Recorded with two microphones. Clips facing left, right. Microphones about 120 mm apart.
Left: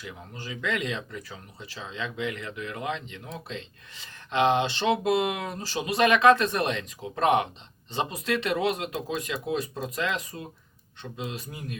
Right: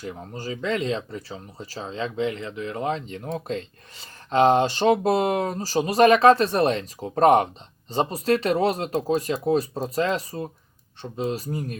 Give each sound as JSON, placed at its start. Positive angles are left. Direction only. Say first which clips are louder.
{"t": 0.0, "sound": "speech", "louder": "right 7 dB", "side_deg": -40}